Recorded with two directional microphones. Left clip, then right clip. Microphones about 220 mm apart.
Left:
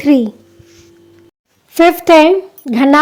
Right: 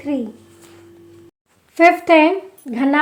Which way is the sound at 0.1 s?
45° left (ahead or behind).